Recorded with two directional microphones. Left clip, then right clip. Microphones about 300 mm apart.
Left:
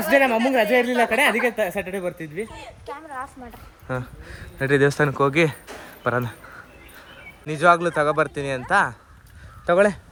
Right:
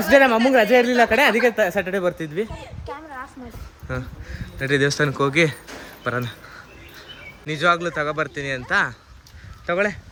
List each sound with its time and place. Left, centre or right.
0.1 s a woman's voice: centre
3.8 s speech: centre
7.4 s speech: centre